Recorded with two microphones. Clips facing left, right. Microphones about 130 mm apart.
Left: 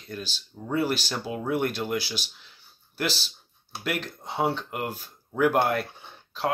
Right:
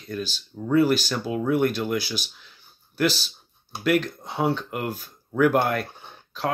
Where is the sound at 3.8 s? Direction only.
25° left (ahead or behind).